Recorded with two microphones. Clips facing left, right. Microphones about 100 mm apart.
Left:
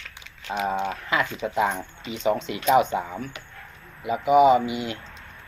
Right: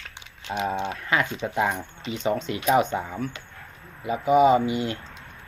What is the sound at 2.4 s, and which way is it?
Speech, 40° right (ahead or behind).